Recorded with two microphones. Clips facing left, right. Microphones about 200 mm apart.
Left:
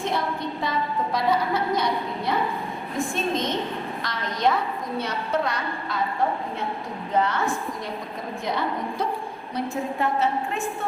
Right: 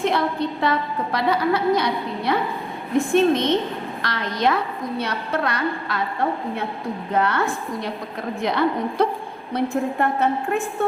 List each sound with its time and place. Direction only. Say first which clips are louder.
0.0 s a woman's voice: right 5 dB; 70° right (ahead or behind)
7.2 s a woman's voice: right 1 dB; 65° right (ahead or behind)
10.0 s a woman's voice: even; 55° right (ahead or behind)